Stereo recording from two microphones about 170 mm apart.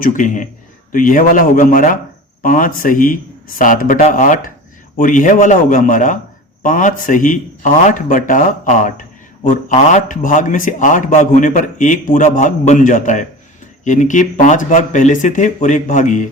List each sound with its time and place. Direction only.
0.0 s a man's voice: 50° left (ahead or behind)